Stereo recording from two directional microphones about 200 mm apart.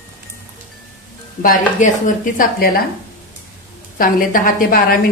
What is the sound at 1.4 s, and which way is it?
Speech, 40° left (ahead or behind).